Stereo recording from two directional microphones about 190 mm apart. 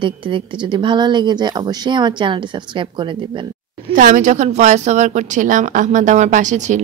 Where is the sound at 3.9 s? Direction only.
45° right (ahead or behind).